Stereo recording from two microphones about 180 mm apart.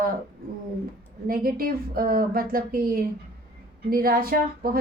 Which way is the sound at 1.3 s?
55° right (ahead or behind).